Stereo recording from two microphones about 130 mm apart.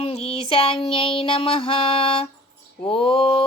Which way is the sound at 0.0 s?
55° left (ahead or behind).